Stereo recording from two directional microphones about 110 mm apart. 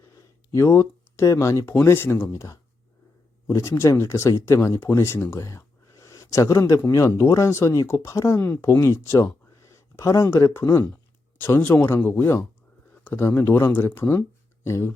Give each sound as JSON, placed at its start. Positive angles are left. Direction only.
{"t": 0.5, "sound": "speech", "side_deg": 25}